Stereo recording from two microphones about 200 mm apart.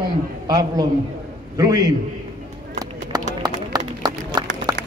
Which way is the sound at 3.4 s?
20° right (ahead or behind).